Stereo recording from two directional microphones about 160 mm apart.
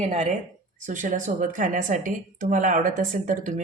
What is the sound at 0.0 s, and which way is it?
A woman's voice, 50° right (ahead or behind).